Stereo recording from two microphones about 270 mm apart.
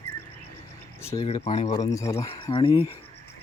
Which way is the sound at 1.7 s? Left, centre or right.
Centre.